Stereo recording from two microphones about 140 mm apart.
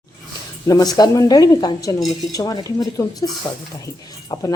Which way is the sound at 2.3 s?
25° left (ahead or behind).